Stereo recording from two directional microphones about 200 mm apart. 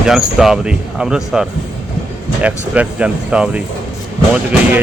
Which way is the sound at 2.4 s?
5° right (ahead or behind).